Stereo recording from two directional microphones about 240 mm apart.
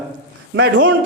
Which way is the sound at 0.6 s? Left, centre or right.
Right.